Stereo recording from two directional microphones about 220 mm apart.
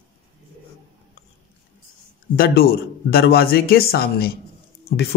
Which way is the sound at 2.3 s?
45° left (ahead or behind).